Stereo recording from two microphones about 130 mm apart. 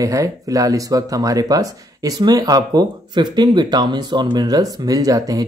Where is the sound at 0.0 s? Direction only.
25° right (ahead or behind).